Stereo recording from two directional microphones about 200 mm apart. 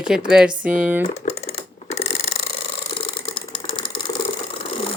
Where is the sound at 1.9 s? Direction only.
30° left (ahead or behind).